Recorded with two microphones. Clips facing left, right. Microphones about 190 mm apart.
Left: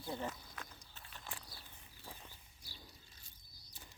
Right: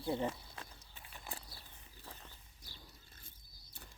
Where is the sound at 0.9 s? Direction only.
10° right (ahead or behind).